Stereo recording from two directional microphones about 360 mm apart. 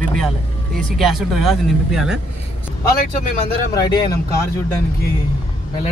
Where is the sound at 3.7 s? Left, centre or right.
Centre.